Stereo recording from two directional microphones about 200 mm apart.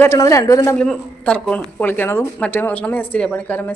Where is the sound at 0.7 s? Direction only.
5° left (ahead or behind).